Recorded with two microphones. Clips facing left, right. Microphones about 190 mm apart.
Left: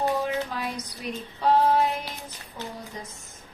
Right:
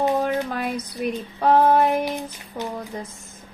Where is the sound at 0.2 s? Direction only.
60° right (ahead or behind).